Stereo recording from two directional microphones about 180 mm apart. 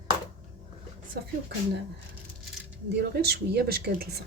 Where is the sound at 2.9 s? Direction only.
65° right (ahead or behind).